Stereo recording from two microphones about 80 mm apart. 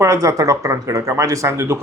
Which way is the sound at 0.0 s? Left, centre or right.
Right.